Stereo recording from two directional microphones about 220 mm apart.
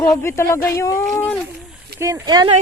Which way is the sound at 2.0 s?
15° right (ahead or behind).